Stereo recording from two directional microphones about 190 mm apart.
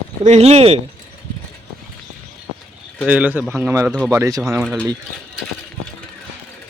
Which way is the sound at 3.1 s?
10° right (ahead or behind).